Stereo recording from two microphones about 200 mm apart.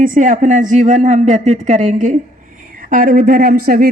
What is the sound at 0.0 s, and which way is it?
Speech, 40° right (ahead or behind).